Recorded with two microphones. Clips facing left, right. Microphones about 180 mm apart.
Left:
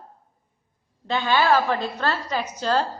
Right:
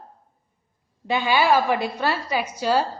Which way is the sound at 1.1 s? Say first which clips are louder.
Right 1 dB; 10° right (ahead or behind).